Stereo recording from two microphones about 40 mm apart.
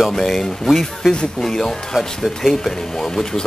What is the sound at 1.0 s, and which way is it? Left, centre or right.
Speech, centre.